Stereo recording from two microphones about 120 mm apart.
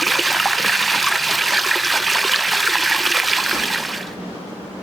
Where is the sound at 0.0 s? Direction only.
Centre (ahead or behind).